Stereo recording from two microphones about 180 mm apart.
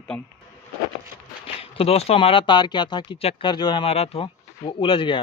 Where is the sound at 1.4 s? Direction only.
30° left (ahead or behind).